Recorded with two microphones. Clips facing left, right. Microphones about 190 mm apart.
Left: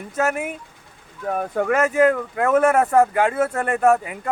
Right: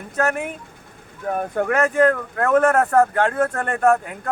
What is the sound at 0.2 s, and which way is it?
Speech, 5° left (ahead or behind).